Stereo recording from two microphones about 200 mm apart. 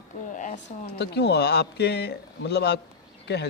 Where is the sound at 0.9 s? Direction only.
55° left (ahead or behind).